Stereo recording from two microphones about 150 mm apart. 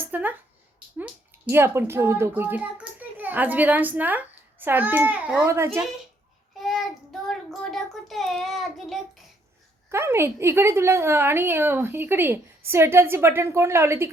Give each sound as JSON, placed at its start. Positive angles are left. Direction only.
{"t": 0.1, "sound": "a child's voice", "side_deg": -10}
{"t": 6.6, "sound": "child singing", "side_deg": 0}
{"t": 9.9, "sound": "a woman's voice", "side_deg": -15}